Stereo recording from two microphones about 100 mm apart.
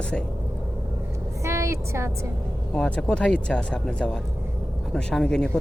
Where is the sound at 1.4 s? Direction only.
30° right (ahead or behind).